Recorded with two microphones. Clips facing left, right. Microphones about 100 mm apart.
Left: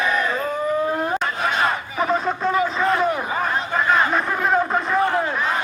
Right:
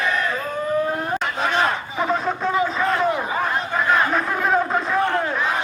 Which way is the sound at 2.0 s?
Centre (ahead or behind).